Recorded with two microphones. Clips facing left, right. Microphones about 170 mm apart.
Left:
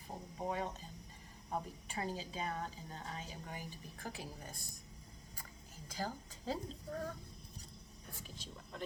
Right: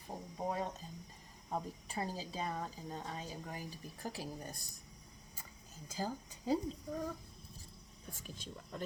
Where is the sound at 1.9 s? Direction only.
35° right (ahead or behind).